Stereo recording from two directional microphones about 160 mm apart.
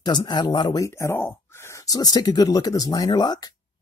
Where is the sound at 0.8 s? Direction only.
15° left (ahead or behind).